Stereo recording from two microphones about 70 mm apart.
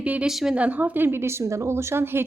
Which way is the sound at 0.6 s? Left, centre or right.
Right.